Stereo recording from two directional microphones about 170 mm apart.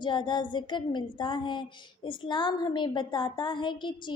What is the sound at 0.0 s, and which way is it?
A woman's voice, 25° left (ahead or behind).